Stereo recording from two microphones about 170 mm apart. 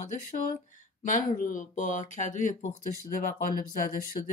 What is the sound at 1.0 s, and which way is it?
Speech, 50° left (ahead or behind).